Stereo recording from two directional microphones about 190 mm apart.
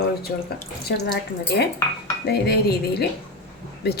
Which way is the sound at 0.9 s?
60° left (ahead or behind).